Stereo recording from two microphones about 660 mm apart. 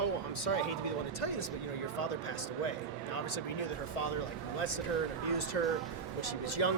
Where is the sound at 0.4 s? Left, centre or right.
Left.